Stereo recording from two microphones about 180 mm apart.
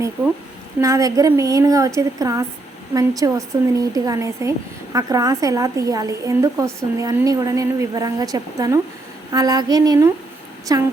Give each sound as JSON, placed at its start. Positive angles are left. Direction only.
{"t": 0.8, "sound": "speech", "side_deg": -15}